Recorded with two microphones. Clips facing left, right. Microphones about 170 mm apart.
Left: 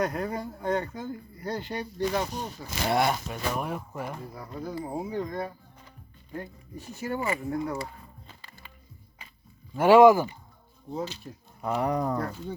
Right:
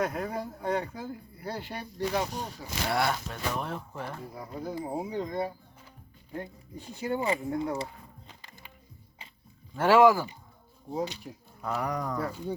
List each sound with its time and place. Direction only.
0.0 s speech: 5° right (ahead or behind)
2.8 s speech: 20° left (ahead or behind)
4.4 s speech: 20° right (ahead or behind)
8.3 s music: 15° right (ahead or behind)
9.7 s speech: 15° left (ahead or behind)
10.9 s speech: 15° right (ahead or behind)
11.6 s speech: 25° left (ahead or behind)
12.2 s speech: 10° right (ahead or behind)